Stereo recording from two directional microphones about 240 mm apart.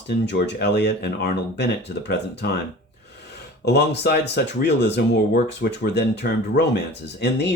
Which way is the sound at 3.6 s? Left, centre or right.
Left.